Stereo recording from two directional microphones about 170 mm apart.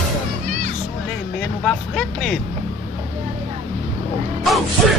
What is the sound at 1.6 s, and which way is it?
Speech, centre (ahead or behind).